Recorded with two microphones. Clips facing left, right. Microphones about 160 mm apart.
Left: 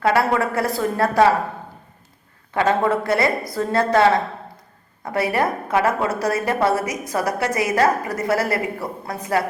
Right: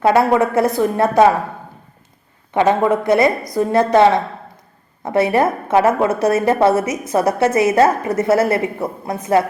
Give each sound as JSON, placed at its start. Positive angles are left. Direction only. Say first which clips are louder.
{"t": 0.0, "sound": "a woman's voice", "louder": "right 5 dB", "side_deg": -20}
{"t": 2.5, "sound": "a woman's voice", "louder": "right 4 dB", "side_deg": -20}